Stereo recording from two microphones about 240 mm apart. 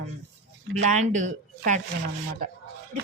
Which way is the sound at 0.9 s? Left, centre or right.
Right.